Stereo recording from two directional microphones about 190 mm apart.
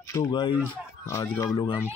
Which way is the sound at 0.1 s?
20° left (ahead or behind).